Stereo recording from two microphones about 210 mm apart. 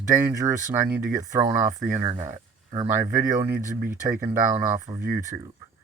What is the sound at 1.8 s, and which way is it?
Speech, 40° right (ahead or behind).